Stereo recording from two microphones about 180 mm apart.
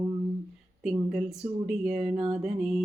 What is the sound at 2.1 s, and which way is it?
Music, 30° right (ahead or behind).